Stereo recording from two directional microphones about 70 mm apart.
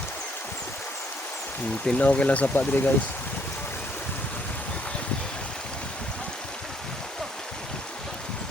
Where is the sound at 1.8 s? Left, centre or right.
Centre.